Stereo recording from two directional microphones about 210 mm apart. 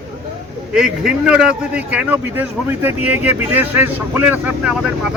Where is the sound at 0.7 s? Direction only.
5° right (ahead or behind).